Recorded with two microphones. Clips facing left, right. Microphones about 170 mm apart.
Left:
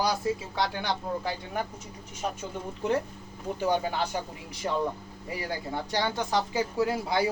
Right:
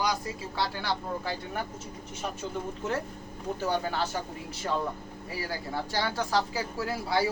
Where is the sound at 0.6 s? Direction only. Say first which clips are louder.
Right 1 dB; 20° left (ahead or behind).